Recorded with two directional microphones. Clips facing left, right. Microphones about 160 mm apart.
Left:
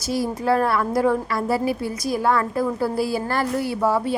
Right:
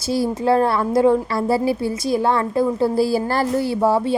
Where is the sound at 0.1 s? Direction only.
25° right (ahead or behind).